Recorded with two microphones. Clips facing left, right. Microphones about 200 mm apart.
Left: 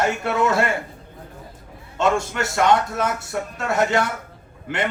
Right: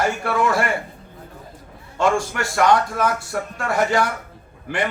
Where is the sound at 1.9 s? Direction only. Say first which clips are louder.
Right 1 dB; 25° left (ahead or behind).